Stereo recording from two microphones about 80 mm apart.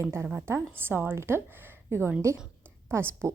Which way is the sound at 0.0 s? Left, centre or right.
Right.